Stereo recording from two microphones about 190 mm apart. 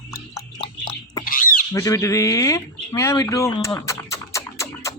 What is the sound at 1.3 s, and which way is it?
Squawk, 45° left (ahead or behind).